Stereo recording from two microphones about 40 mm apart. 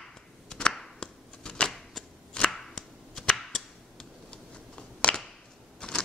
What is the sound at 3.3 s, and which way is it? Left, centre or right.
Cap gun, centre.